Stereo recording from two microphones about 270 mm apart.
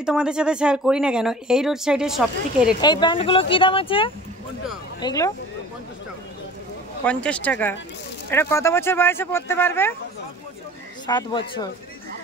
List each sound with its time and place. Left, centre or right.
0.0 s speech: centre
2.8 s speech: centre
7.1 s speech: centre
11.1 s speech: centre